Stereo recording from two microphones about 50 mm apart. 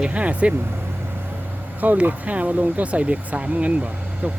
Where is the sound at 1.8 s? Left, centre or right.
Right.